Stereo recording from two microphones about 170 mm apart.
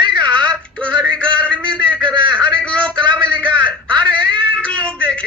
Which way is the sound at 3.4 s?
5° left (ahead or behind).